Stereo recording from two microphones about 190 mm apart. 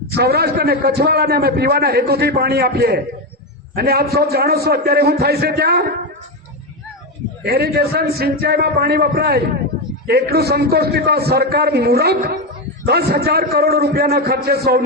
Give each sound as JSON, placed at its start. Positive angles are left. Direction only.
{"t": 0.2, "sound": "a man's voice", "side_deg": -55}
{"t": 7.4, "sound": "a man's voice", "side_deg": -55}